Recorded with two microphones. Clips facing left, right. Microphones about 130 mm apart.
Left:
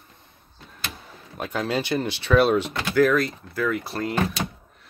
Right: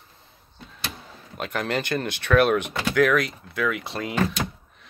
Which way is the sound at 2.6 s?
75° right (ahead or behind).